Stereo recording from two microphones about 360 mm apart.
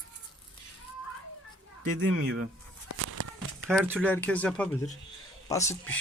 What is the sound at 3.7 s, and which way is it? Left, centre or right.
Speech, centre.